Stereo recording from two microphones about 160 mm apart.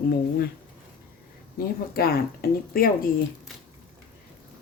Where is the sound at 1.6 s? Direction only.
70° left (ahead or behind).